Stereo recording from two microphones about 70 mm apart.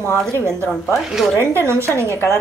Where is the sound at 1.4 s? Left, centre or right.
Right.